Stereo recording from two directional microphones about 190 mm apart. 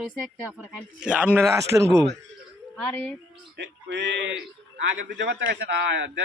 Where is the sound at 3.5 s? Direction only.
65° right (ahead or behind).